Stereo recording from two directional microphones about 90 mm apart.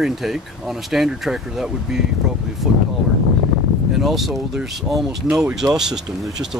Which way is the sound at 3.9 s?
Centre (ahead or behind).